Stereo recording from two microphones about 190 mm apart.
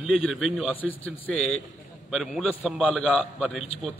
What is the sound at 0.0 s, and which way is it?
A man's voice, 5° right (ahead or behind).